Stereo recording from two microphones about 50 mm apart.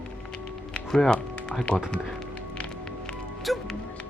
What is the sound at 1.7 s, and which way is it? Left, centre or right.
Speech, left.